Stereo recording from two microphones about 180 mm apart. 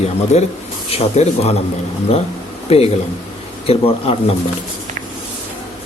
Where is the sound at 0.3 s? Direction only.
40° left (ahead or behind).